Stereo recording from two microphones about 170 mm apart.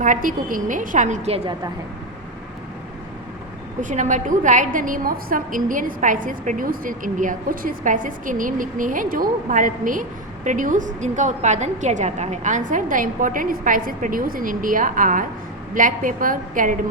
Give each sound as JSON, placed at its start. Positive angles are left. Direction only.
{"t": 0.0, "sound": "a woman's voice", "side_deg": -50}
{"t": 3.8, "sound": "a woman's voice", "side_deg": -45}